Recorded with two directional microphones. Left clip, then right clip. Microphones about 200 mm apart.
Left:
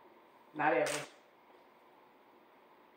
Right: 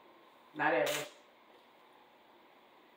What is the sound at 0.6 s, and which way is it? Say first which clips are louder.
Speech: even; 15° left (ahead or behind).